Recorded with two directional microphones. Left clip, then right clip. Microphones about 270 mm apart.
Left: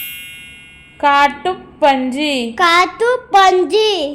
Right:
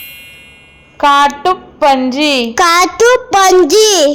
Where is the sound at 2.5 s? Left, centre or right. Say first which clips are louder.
Even; right.